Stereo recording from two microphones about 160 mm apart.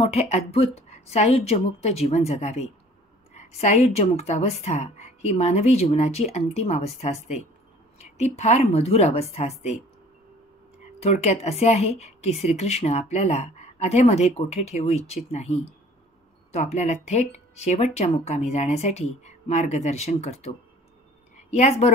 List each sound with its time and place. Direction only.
0.0 s a woman's voice: 40° left (ahead or behind)
11.0 s a woman's voice: 45° left (ahead or behind)